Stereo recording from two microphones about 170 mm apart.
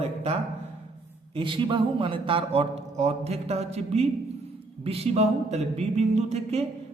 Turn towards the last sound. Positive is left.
turn(degrees=-40)  # may be behind; listen again after turning